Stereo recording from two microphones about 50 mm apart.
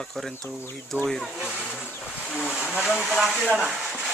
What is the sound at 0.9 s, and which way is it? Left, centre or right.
Speech, left.